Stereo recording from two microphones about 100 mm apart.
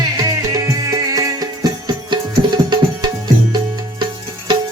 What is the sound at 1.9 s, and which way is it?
Tabla, 50° right (ahead or behind).